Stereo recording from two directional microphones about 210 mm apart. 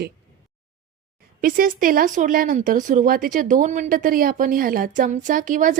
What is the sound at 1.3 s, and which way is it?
Speech, 40° right (ahead or behind).